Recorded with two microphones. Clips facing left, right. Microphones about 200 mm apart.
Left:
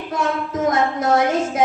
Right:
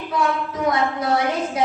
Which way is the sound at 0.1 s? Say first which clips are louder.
Even; 45° left (ahead or behind).